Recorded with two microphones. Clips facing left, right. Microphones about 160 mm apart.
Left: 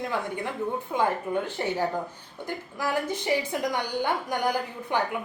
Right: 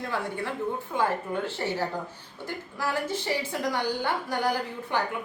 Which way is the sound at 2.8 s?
15° left (ahead or behind).